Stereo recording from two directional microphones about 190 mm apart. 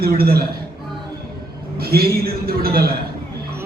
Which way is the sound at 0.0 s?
50° right (ahead or behind).